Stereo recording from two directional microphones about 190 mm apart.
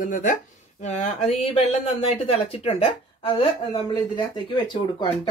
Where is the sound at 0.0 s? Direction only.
45° left (ahead or behind); by 5.3 s 25° left (ahead or behind).